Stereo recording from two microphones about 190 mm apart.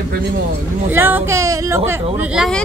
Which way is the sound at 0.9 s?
10° right (ahead or behind).